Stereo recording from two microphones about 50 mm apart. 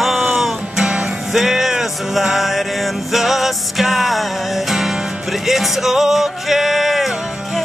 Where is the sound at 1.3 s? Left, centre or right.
Centre.